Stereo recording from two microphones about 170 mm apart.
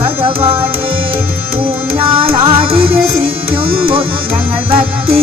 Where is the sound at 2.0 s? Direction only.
30° right (ahead or behind).